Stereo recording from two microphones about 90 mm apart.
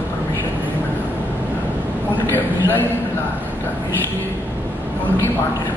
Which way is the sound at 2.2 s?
20° left (ahead or behind).